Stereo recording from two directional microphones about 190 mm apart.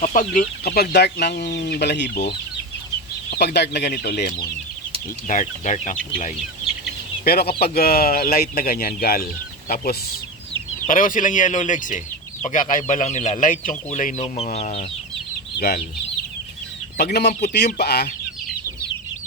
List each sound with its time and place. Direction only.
0.0 s speech: 45° left (ahead or behind)
5.3 s speech: 40° left (ahead or behind)
7.3 s speech: 55° left (ahead or behind); by 14.8 s 35° left (ahead or behind)
15.5 s speech: 55° left (ahead or behind)
17.0 s speech: 60° left (ahead or behind)